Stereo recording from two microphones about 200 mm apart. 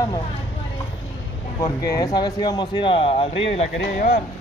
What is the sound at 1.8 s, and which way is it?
Speech, 20° left (ahead or behind).